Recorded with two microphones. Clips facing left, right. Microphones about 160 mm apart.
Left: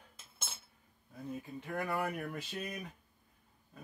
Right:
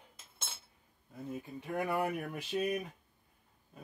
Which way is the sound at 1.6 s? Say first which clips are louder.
Right 3 dB; 15° right (ahead or behind).